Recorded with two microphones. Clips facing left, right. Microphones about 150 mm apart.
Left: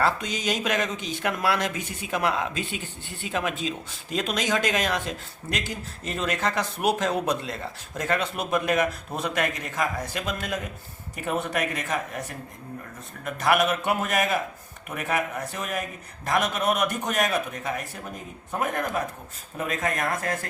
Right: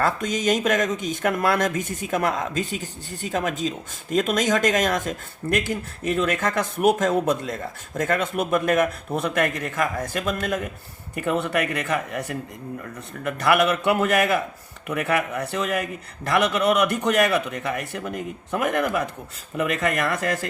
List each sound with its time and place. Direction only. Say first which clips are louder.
0.0 s a man's voice: right 3 dB; 50° right (ahead or behind); by 20.5 s 90° right